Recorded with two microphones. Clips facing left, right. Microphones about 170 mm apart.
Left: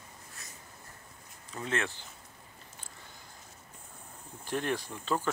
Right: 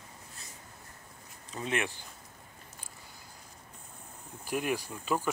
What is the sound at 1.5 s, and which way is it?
Speech, 15° right (ahead or behind).